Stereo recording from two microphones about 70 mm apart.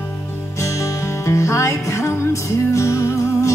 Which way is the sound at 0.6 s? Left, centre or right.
Left.